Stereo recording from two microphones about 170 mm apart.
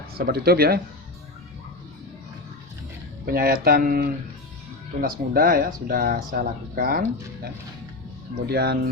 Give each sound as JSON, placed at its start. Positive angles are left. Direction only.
{"t": 0.1, "sound": "speech", "side_deg": -65}
{"t": 3.2, "sound": "speech", "side_deg": -60}
{"t": 8.4, "sound": "speech", "side_deg": -70}